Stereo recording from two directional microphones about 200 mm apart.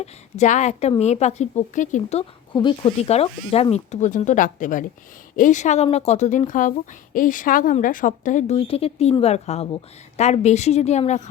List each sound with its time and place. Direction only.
0.0 s speech: 35° left (ahead or behind)